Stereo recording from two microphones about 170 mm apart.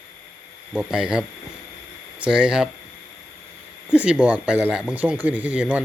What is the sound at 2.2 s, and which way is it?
Speech, 5° right (ahead or behind).